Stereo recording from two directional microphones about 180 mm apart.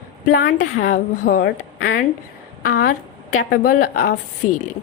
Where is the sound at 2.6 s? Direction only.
55° left (ahead or behind).